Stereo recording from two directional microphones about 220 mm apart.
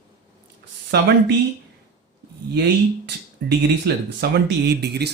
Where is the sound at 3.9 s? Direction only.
45° right (ahead or behind).